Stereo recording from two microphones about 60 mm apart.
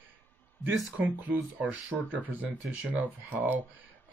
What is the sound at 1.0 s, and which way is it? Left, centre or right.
Speech, right.